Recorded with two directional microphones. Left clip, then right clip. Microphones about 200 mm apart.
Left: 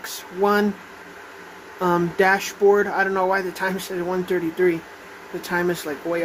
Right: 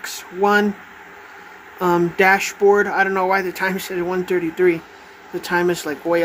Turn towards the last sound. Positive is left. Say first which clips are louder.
# right 4 dB
turn(degrees=-15)  # may be behind; listen again after turning